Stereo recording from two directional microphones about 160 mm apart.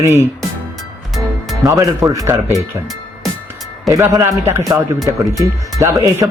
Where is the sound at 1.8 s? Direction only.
20° right (ahead or behind).